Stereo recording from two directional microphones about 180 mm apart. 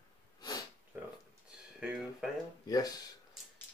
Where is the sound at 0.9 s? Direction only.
10° right (ahead or behind).